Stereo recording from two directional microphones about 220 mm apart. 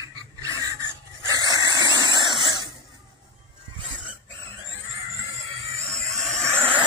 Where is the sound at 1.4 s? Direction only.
15° left (ahead or behind).